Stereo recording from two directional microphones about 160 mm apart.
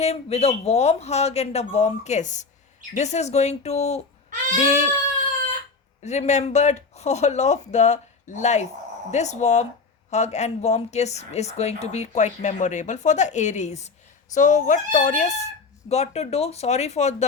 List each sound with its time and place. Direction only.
0.0 s speech: 40° left (ahead or behind)
6.0 s speech: 45° left (ahead or behind)